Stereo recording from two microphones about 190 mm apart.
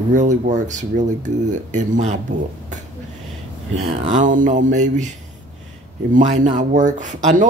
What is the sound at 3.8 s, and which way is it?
Speech, 35° right (ahead or behind).